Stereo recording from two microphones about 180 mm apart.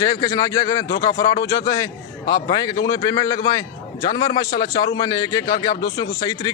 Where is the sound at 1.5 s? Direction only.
20° left (ahead or behind).